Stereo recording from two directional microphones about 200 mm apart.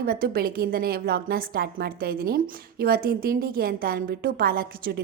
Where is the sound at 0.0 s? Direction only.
50° right (ahead or behind).